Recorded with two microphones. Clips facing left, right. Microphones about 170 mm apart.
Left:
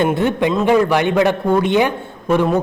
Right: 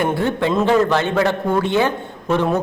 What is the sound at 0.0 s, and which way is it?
A woman's voice, 20° left (ahead or behind).